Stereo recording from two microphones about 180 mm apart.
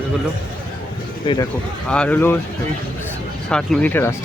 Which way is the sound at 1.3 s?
25° left (ahead or behind).